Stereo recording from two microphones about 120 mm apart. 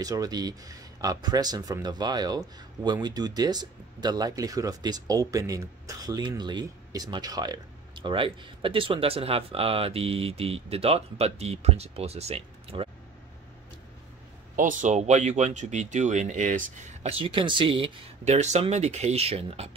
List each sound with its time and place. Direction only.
0.0 s speech: 30° right (ahead or behind); by 12.9 s 55° right (ahead or behind)
14.5 s speech: 90° right
17.1 s speech: 45° right (ahead or behind)
18.2 s speech: 70° right (ahead or behind)